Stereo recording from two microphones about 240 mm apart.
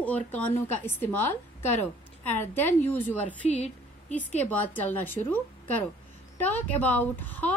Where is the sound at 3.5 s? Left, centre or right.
Left.